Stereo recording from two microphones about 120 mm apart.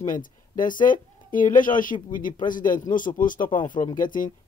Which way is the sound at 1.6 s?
90° left.